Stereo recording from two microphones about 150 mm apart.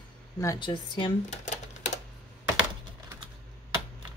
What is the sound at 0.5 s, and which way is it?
Speech, 30° left (ahead or behind).